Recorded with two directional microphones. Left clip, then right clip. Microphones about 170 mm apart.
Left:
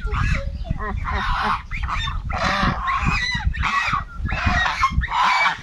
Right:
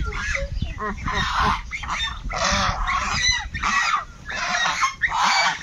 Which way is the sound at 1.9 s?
10° right (ahead or behind).